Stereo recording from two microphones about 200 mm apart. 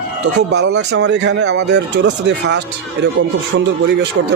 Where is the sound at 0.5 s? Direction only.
60° right (ahead or behind).